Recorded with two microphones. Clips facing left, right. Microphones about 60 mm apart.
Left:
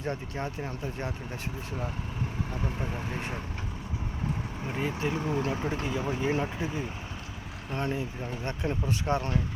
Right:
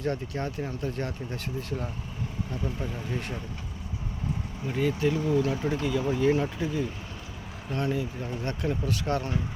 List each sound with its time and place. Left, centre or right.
0.0 s speech: centre
2.5 s speech: left
4.7 s speech: left